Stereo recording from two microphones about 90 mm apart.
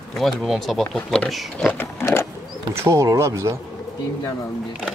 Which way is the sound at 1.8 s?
30° left (ahead or behind).